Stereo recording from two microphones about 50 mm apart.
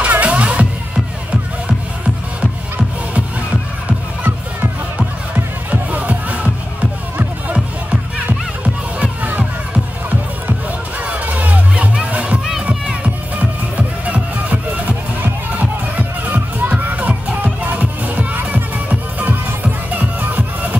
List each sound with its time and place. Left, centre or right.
0.0 s music: right
5.3 s music: right
8.6 s music: right
11.1 s music: right
16.8 s music: right